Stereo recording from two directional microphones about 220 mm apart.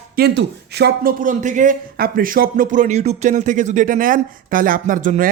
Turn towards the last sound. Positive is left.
turn(degrees=-35)  # may be behind; listen again after turning